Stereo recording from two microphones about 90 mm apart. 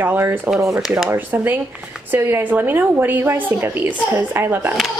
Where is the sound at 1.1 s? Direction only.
20° right (ahead or behind).